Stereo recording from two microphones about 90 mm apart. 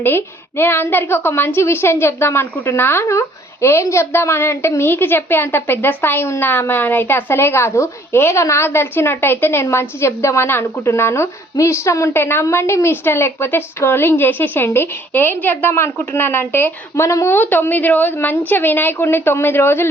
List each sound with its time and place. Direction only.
0.0 s a woman's voice: 25° left (ahead or behind)
16.9 s a woman's voice: 35° left (ahead or behind)